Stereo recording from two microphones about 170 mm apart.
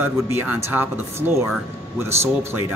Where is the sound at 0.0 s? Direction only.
15° right (ahead or behind).